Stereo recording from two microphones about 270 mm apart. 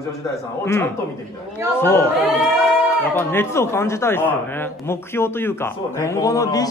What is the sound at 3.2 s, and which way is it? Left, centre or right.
A man's voice, centre.